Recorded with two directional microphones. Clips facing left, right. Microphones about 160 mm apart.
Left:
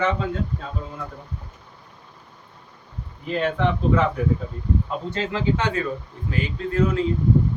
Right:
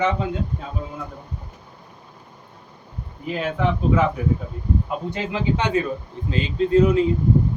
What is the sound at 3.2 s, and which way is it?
A man's voice, 5° right (ahead or behind).